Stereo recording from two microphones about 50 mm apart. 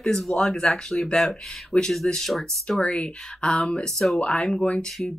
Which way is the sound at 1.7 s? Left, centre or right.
Centre.